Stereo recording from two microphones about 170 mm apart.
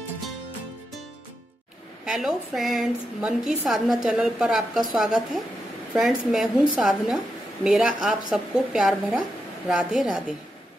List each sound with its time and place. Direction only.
2.0 s a woman's voice: centre (ahead or behind)